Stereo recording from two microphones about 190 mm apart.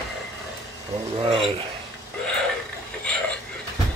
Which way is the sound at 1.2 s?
30° right (ahead or behind).